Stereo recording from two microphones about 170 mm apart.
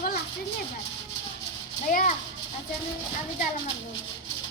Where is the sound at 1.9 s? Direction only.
50° left (ahead or behind).